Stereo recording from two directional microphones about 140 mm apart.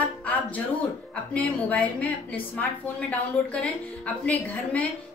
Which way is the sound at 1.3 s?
10° left (ahead or behind).